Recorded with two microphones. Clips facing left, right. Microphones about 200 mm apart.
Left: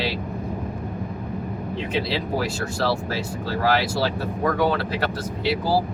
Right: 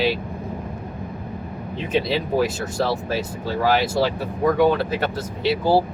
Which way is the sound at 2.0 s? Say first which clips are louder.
Right 4 dB; 20° right (ahead or behind).